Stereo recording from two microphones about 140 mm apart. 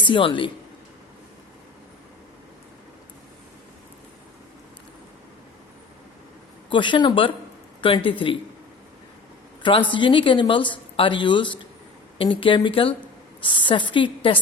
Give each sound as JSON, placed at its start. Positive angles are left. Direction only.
{"t": 0.0, "sound": "a woman's voice", "side_deg": 35}
{"t": 6.7, "sound": "a woman's voice", "side_deg": 35}
{"t": 9.9, "sound": "a woman's voice", "side_deg": 35}